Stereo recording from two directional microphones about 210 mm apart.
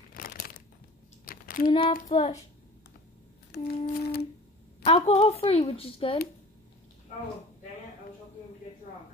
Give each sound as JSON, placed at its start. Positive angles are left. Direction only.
{"t": 0.1, "sound": "crumpling", "side_deg": 45}
{"t": 1.2, "sound": "a sound", "side_deg": 45}
{"t": 1.7, "sound": "a woman's voice", "side_deg": 25}
{"t": 2.0, "sound": "child singing", "side_deg": 30}
{"t": 3.8, "sound": "a sound", "side_deg": 45}
{"t": 4.8, "sound": "a woman's voice", "side_deg": 30}